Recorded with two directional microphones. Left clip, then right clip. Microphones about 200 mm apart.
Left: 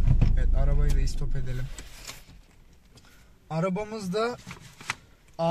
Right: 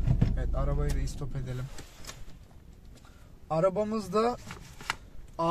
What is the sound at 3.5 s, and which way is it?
Speech, 25° right (ahead or behind).